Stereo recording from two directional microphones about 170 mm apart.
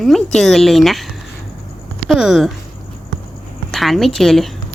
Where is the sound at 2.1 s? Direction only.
Centre (ahead or behind).